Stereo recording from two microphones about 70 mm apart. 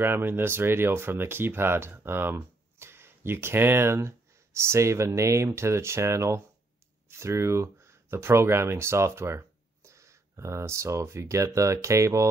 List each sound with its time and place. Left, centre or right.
0.0 s speech: right